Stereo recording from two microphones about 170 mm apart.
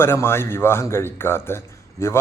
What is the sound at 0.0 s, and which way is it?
Speech, 15° left (ahead or behind).